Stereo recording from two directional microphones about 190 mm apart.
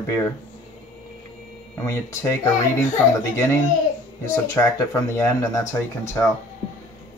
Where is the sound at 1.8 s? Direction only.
15° left (ahead or behind).